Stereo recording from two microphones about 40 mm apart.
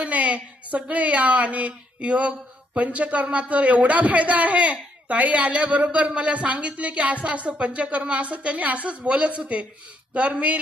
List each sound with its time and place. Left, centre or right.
0.0 s speech: right